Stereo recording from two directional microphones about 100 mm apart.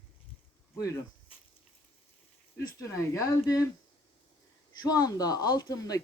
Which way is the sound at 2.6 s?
30° left (ahead or behind).